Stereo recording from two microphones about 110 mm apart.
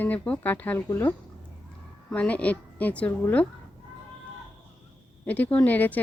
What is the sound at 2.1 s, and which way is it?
Speech, 15° left (ahead or behind).